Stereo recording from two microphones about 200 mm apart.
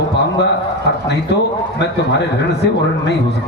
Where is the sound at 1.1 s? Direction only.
60° left (ahead or behind).